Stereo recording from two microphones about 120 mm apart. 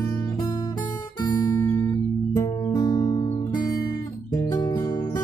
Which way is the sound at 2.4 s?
35° left (ahead or behind).